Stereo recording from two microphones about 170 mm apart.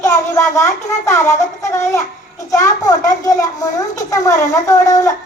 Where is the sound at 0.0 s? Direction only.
15° left (ahead or behind).